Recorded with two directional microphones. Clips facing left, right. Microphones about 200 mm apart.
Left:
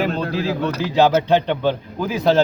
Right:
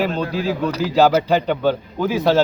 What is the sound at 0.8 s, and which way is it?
Speech, 5° right (ahead or behind).